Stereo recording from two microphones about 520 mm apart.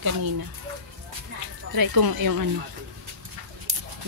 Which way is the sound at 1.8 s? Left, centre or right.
Right.